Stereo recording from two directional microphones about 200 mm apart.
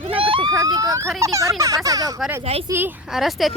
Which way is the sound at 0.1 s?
25° right (ahead or behind).